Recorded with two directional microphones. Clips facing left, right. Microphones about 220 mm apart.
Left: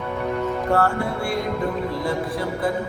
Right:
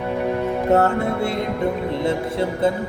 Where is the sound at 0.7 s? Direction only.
20° right (ahead or behind).